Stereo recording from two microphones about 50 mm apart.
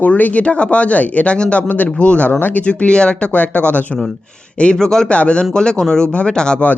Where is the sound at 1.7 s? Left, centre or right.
Left.